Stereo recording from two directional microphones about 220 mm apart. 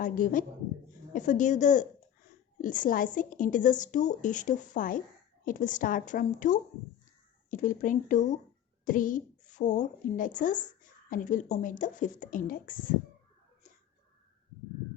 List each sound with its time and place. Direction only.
0.0 s a woman's voice: 35° left (ahead or behind)